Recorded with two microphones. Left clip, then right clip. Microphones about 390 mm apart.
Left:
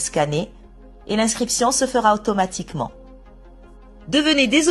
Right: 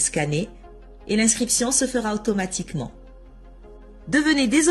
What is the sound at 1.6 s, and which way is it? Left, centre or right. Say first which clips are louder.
Speech: left 10 dB; left.